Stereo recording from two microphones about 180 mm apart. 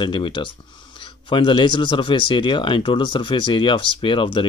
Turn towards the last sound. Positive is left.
turn(degrees=30)  # may be behind; listen again after turning